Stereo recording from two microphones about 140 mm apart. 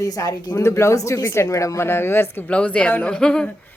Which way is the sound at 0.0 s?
25° left (ahead or behind).